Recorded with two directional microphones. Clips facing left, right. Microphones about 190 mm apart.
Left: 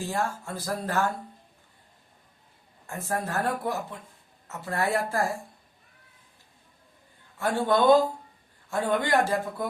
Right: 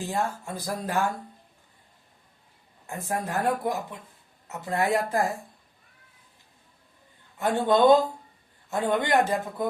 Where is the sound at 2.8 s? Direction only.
15° right (ahead or behind).